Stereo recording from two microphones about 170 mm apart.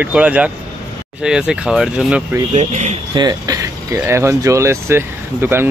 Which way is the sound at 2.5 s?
40° right (ahead or behind).